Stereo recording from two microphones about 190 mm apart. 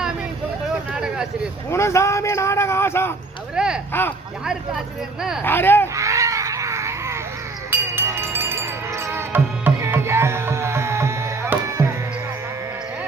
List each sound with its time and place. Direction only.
0.9 s a sound: 5° right (ahead or behind)
1.7 s a man's voice: 15° left (ahead or behind)
3.5 s speech: 5° right (ahead or behind)
5.4 s a man's voice: 10° left (ahead or behind)
5.9 s baby cry: 15° right (ahead or behind)
7.7 s glass: 10° right (ahead or behind)
9.0 s music: 10° right (ahead or behind)